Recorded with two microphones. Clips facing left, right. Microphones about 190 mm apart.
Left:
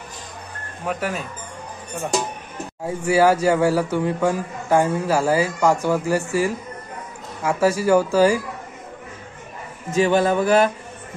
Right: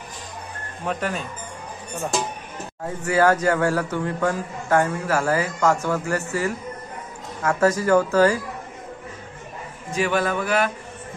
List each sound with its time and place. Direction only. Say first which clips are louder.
0.8 s speech: left 1 dB; 5° left (ahead or behind)
2.8 s speech: left 3 dB; 10° left (ahead or behind)
9.8 s a sound: left 5 dB; 25° left (ahead or behind)